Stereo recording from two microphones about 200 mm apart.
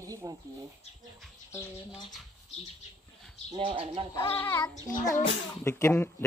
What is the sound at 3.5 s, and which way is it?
Speech, 25° right (ahead or behind).